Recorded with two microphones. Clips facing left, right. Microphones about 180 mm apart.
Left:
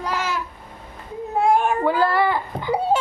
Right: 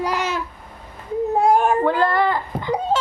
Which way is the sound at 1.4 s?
40° right (ahead or behind).